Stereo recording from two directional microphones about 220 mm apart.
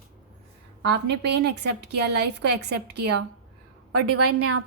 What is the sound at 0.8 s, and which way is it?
A woman's voice, 50° right (ahead or behind).